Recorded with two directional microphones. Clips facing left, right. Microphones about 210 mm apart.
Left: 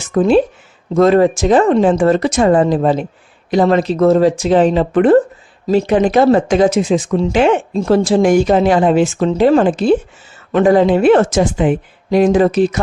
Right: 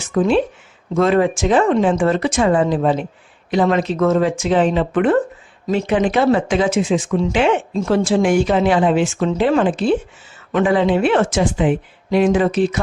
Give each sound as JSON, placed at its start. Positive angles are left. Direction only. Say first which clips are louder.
{"t": 0.1, "sound": "speech", "louder": "left 4 dB", "side_deg": 40}